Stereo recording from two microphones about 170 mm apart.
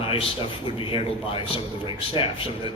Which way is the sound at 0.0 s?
35° left (ahead or behind).